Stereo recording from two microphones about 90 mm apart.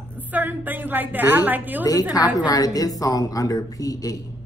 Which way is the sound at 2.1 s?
50° left (ahead or behind).